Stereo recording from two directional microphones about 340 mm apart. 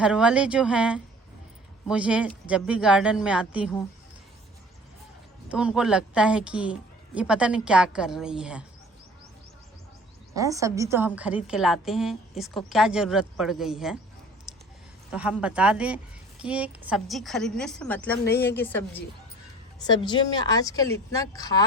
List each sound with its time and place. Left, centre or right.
0.0 s a woman's voice: centre
5.5 s a woman's voice: centre
10.3 s a woman's voice: centre
14.5 s a sound: centre
15.1 s a woman's voice: centre
18.3 s a woman's voice: left
18.5 s a woman's voice: centre